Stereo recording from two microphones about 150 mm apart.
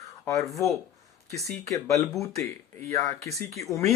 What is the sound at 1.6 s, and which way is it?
Speech, 20° left (ahead or behind).